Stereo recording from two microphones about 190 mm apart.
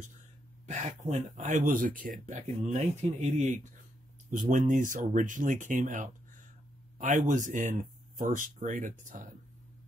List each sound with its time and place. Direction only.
0.7 s speech: 35° right (ahead or behind)